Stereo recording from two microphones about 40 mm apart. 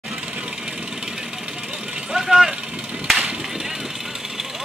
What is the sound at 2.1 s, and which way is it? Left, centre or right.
Vehicle, centre.